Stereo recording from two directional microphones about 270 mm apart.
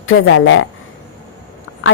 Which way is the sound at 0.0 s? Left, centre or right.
Left.